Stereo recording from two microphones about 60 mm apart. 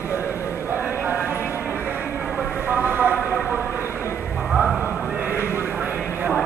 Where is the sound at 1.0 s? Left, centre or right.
Right.